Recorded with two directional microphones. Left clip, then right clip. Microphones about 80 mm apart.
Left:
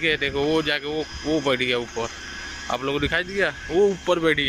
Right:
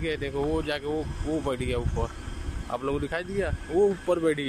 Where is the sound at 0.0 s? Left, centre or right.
Centre.